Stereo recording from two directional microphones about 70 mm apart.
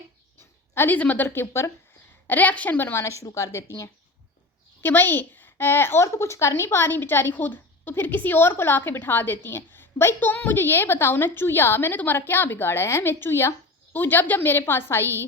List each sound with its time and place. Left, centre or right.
0.7 s a woman's voice: left
0.9 s a woman's voice: left
3.0 s speech: left
4.8 s a woman's voice: left